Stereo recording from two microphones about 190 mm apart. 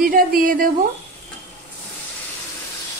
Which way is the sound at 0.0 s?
50° right (ahead or behind).